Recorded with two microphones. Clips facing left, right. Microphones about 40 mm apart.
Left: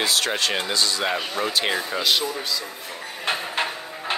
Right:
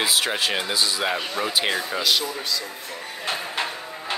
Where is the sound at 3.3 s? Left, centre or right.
Left.